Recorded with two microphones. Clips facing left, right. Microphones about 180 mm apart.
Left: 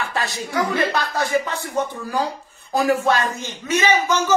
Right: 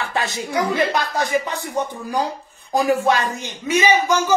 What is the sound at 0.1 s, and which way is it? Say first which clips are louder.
Speech: right 2 dB; 20° right (ahead or behind).